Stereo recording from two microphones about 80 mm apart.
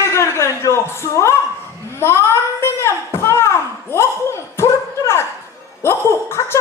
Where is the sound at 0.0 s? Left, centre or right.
Left.